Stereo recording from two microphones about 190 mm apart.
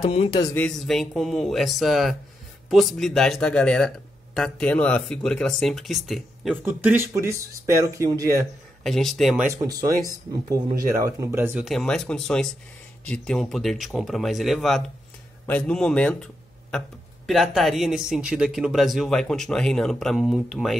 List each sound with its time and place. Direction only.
0.0 s speech: 30° left (ahead or behind)
0.6 s speech: 5° left (ahead or behind); by 8.5 s 15° right (ahead or behind)
8.8 s speech: centre (ahead or behind)
9.5 s speech: 20° right (ahead or behind)
11.0 s speech: 15° right (ahead or behind)
11.7 s speech: 5° left (ahead or behind)
17.3 s speech: centre (ahead or behind)